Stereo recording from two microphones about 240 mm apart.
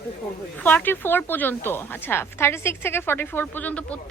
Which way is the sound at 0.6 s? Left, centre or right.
Centre.